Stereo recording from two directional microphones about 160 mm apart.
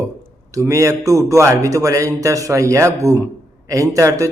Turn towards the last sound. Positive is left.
turn(degrees=-20)  # may be behind; listen again after turning